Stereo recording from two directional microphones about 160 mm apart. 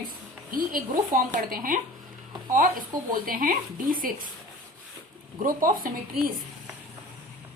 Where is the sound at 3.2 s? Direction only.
60° right (ahead or behind).